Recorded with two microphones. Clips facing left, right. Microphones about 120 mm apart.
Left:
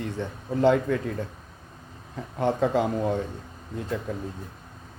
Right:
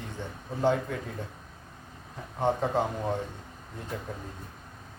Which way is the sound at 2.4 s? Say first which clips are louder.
Left 3 dB; 75° left (ahead or behind).